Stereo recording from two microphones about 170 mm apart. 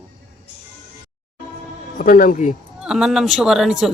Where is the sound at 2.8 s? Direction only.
5° right (ahead or behind).